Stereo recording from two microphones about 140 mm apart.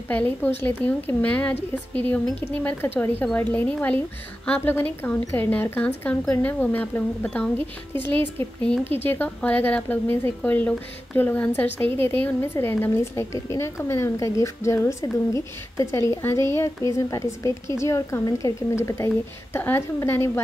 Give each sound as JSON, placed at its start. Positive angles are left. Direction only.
{"t": 0.1, "sound": "a woman's voice", "side_deg": 10}